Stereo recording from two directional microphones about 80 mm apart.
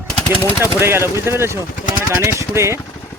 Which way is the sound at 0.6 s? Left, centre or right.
Right.